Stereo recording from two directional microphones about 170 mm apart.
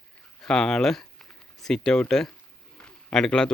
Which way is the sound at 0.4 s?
5° left (ahead or behind).